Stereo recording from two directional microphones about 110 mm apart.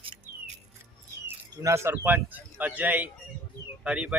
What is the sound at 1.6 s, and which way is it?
Speech, 25° right (ahead or behind).